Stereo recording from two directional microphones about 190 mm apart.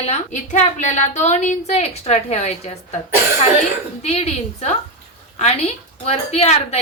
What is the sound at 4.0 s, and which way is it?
A woman's voice, 35° left (ahead or behind).